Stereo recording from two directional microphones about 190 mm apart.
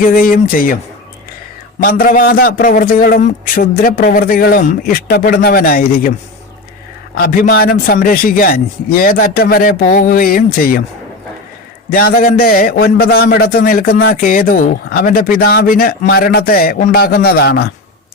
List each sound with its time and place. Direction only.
0.1 s a man's voice: 50° left (ahead or behind)
1.8 s a man's voice: 45° left (ahead or behind)
7.2 s a man's voice: 50° left (ahead or behind)
11.9 s a man's voice: 50° left (ahead or behind)